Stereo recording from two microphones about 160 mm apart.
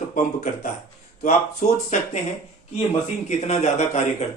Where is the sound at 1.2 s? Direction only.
50° left (ahead or behind).